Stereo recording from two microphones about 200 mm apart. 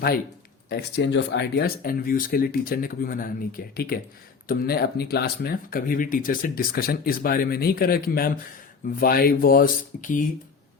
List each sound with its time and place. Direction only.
0.7 s speech: 55° left (ahead or behind)